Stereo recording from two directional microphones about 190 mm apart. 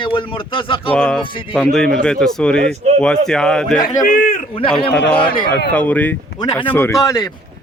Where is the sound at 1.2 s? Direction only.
25° left (ahead or behind).